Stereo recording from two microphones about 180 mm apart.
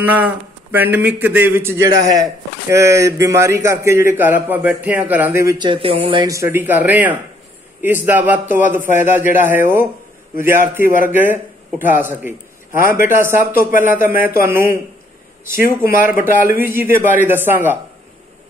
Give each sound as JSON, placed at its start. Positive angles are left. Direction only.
{"t": 0.0, "sound": "a man's voice", "side_deg": -10}
{"t": 5.7, "sound": "a man's voice", "side_deg": -30}